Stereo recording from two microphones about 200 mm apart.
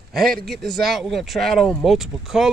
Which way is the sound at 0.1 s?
Centre (ahead or behind).